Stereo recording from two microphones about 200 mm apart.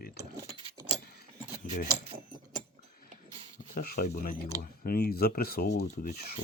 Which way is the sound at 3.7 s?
45° left (ahead or behind).